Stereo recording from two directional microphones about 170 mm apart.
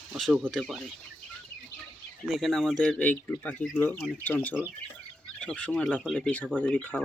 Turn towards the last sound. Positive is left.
turn(degrees=10)  # may be behind; listen again after turning